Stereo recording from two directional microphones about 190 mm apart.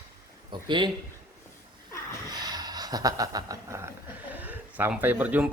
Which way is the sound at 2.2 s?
20° right (ahead or behind).